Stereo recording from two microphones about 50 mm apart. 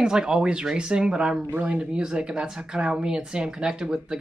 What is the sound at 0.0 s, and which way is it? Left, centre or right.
Speech, centre.